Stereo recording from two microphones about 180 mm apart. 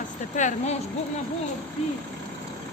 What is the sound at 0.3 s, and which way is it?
Speech, 40° left (ahead or behind).